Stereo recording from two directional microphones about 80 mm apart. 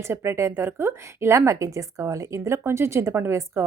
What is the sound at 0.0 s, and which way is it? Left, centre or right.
A woman's voice, right.